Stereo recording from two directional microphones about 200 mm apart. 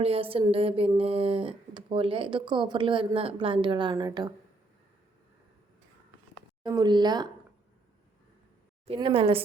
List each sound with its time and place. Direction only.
0.0 s speech: 30° right (ahead or behind)
6.6 s speech: 20° right (ahead or behind)
8.9 s speech: 25° right (ahead or behind)